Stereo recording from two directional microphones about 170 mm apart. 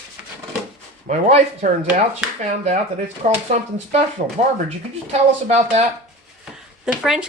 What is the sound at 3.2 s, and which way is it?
Speech, 45° right (ahead or behind).